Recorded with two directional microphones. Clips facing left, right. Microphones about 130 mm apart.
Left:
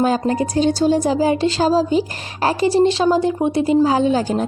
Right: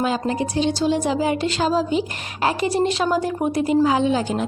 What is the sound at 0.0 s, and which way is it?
A woman's voice, 40° left (ahead or behind).